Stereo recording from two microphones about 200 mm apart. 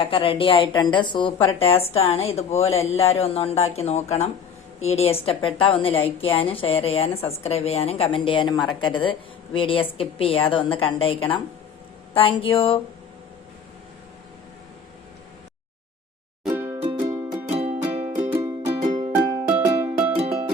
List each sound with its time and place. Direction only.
0.0 s a woman's voice: 25° left (ahead or behind)
16.5 s music: 15° right (ahead or behind)
16.8 s music: 25° right (ahead or behind)
18.3 s music: 15° right (ahead or behind)
18.9 s music: 35° right (ahead or behind)
19.5 s music: 10° right (ahead or behind)
20.1 s music: 30° right (ahead or behind)